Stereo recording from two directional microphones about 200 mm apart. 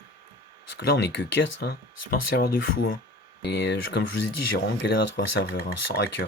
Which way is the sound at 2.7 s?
85° left.